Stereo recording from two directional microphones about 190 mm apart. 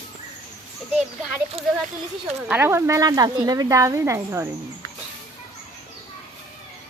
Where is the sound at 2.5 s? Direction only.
10° right (ahead or behind).